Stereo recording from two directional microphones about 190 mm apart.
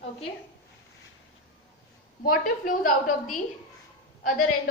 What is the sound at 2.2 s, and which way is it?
A woman's voice, 50° left (ahead or behind).